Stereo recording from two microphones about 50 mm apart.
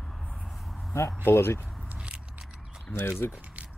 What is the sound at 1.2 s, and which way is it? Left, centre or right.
Speech, left.